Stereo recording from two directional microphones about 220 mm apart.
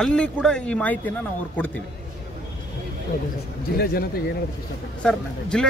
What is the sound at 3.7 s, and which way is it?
Speech, 45° left (ahead or behind).